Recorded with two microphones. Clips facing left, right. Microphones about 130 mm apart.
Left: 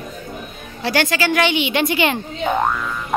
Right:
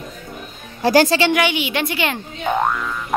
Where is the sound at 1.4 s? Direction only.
5° right (ahead or behind).